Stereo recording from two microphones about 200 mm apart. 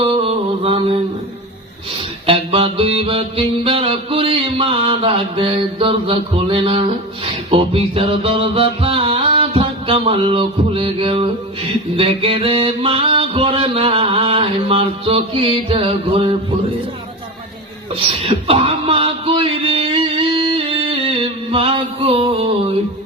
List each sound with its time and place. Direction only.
0.0 s music: 30° right (ahead or behind)
2.2 s music: 25° right (ahead or behind)
18.3 s a sound: 30° right (ahead or behind)